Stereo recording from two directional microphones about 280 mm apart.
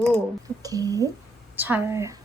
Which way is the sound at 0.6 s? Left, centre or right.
Centre.